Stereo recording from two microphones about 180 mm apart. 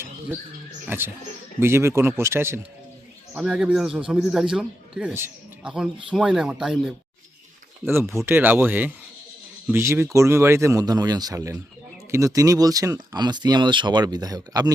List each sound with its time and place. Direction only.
0.9 s a man's voice: 10° right (ahead or behind)